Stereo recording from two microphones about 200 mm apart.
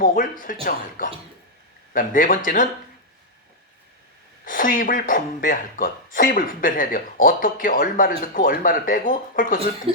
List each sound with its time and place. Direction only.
0.0 s speech: 40° left (ahead or behind)
4.4 s speech: 45° left (ahead or behind)